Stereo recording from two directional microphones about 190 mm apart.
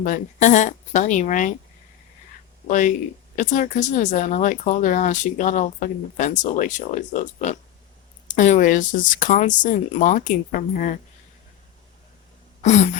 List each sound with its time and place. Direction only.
0.0 s speech: 40° left (ahead or behind)
2.6 s speech: 40° left (ahead or behind)
12.6 s speech: 35° left (ahead or behind)